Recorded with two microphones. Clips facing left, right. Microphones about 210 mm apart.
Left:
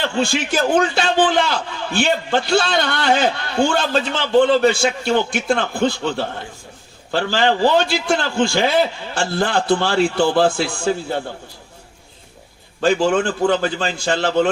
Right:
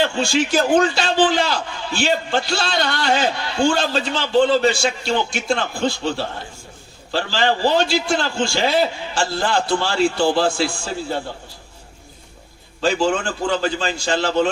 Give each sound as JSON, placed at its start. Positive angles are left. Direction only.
{"t": 0.0, "sound": "a man's voice", "side_deg": 55}
{"t": 12.8, "sound": "a man's voice", "side_deg": 55}